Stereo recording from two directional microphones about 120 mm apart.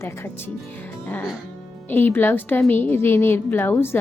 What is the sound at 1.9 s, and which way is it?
A woman's voice, 15° left (ahead or behind).